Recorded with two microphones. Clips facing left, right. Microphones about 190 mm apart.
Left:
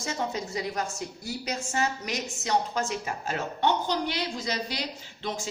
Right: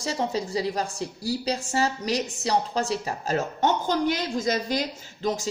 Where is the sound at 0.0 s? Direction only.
35° right (ahead or behind).